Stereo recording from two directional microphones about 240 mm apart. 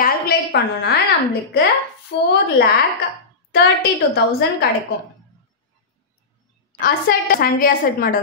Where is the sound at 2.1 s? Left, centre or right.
Left.